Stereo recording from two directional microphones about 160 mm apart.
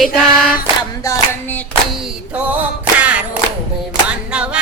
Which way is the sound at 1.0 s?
20° left (ahead or behind).